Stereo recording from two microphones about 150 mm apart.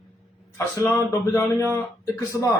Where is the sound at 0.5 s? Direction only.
20° left (ahead or behind).